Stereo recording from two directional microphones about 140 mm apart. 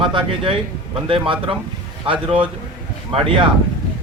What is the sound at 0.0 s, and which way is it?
Speech, 35° right (ahead or behind).